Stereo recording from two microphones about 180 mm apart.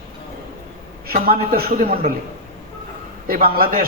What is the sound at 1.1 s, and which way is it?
A man's voice, 55° right (ahead or behind).